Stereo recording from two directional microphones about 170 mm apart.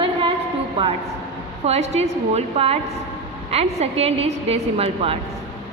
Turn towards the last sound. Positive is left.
turn(degrees=-35)  # may be behind; listen again after turning